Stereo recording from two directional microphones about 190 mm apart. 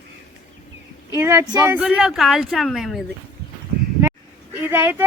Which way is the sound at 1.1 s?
15° right (ahead or behind).